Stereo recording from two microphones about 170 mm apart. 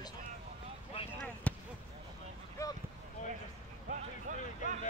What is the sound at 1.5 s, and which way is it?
Basketball bounce, 10° left (ahead or behind).